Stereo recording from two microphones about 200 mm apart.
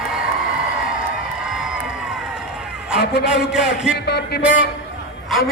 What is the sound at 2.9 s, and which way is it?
Speech, 55° left (ahead or behind).